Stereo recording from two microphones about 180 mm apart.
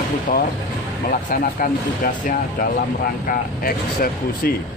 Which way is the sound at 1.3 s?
50° left (ahead or behind).